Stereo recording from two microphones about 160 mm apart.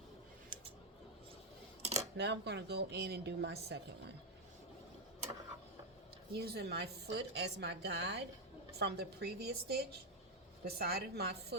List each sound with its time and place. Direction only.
1.8 s a sound: 40° right (ahead or behind)
2.1 s a woman's voice: 90° right
6.3 s a woman's voice: 85° right